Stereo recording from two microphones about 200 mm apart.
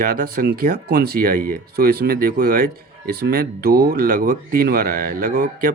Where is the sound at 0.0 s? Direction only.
45° right (ahead or behind).